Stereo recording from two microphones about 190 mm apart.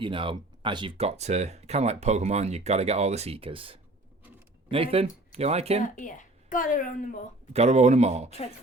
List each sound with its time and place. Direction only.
0.0 s speech: 25° right (ahead or behind)
5.8 s a woman's voice: 45° left (ahead or behind)
7.5 s speech: 35° right (ahead or behind)